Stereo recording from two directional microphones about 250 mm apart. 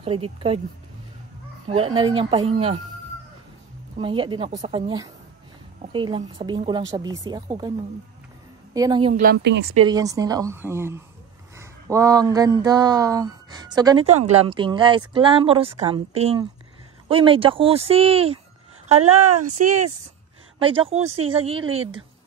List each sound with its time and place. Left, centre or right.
0.0 s speech: right
1.7 s speech: right
4.0 s speech: right
8.7 s speech: centre
9.1 s speech: right
9.8 s speech: centre
14.0 s speech: right
19.6 s speech: right
20.5 s speech: right